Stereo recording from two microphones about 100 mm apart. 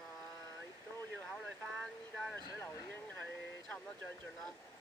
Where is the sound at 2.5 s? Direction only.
20° left (ahead or behind).